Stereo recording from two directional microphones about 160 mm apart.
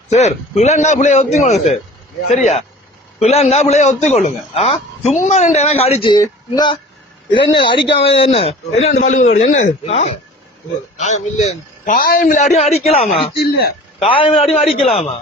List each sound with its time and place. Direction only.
0.1 s a man's voice: 45° left (ahead or behind)
7.3 s a man's voice: 30° left (ahead or behind)
13.3 s a man's voice: 85° left
14.0 s a man's voice: 35° left (ahead or behind)